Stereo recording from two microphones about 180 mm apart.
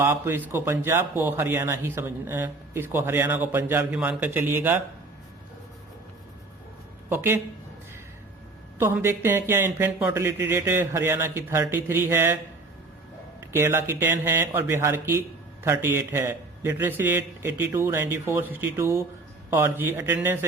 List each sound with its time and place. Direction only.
0.0 s a man's voice: 15° right (ahead or behind)
7.1 s a man's voice: 10° right (ahead or behind)
8.8 s a man's voice: 15° right (ahead or behind)
13.5 s a man's voice: 15° right (ahead or behind)